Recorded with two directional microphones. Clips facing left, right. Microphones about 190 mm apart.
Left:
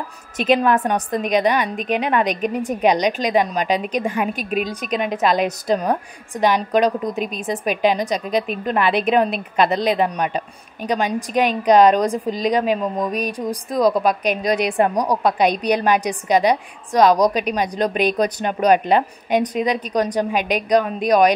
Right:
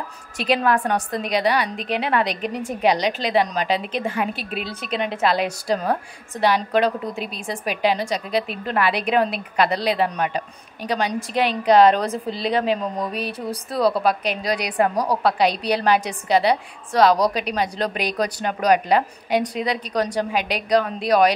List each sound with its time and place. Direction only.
0.4 s a woman's voice: 20° left (ahead or behind)